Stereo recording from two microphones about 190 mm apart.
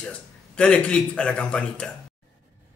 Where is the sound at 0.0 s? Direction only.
5° left (ahead or behind).